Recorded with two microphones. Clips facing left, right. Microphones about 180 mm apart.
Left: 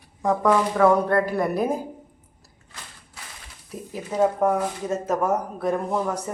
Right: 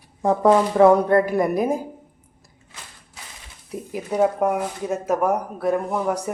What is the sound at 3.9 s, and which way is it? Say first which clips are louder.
Speech: right 2 dB; 15° right (ahead or behind).